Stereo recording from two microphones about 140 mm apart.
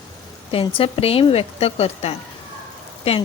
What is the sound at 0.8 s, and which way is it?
Speech, 45° left (ahead or behind).